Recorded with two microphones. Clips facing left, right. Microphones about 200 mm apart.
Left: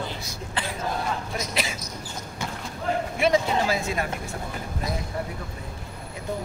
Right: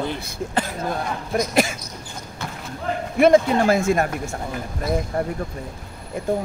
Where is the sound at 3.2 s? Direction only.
50° right (ahead or behind).